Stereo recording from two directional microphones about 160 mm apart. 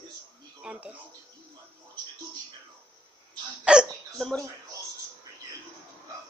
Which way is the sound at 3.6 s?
5° right (ahead or behind).